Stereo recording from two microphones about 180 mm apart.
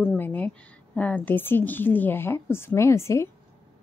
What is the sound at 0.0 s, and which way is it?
A woman's voice, 10° left (ahead or behind).